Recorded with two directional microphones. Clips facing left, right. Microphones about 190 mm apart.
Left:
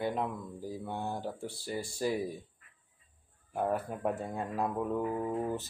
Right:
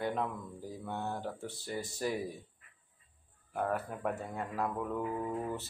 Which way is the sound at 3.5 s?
15° left (ahead or behind).